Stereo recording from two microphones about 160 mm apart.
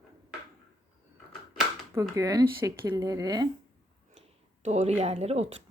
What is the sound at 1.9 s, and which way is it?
Speech, 20° right (ahead or behind).